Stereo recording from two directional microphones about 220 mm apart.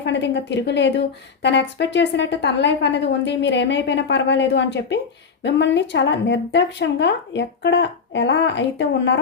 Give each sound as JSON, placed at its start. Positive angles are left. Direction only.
{"t": 0.0, "sound": "a woman's voice", "side_deg": 55}